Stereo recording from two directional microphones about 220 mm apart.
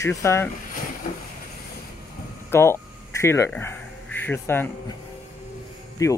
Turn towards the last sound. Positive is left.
turn(degrees=15)  # may be behind; listen again after turning